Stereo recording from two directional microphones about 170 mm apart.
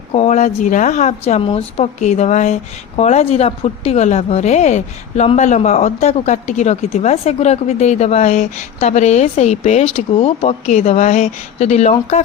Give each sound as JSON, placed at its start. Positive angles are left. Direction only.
{"t": 0.1, "sound": "speech", "side_deg": 40}